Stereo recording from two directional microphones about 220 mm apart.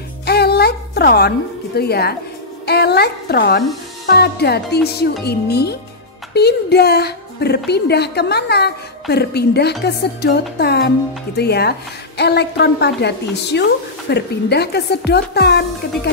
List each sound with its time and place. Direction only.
0.2 s music: 45° left (ahead or behind)
1.8 s a woman's voice: 45° left (ahead or behind)